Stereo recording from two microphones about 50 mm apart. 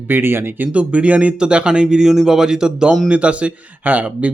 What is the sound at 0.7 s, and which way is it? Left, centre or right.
Speech, right.